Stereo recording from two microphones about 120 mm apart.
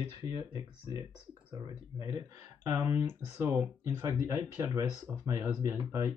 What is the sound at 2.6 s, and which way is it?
Speech, 20° right (ahead or behind).